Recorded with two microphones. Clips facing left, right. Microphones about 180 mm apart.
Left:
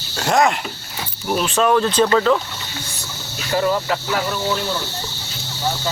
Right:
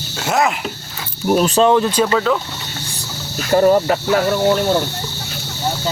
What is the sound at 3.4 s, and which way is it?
Speech, 45° right (ahead or behind).